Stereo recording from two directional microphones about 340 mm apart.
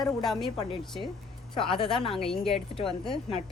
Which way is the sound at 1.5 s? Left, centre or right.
Centre.